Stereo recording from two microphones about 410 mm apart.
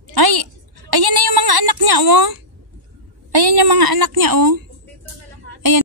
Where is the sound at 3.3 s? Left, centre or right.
Right.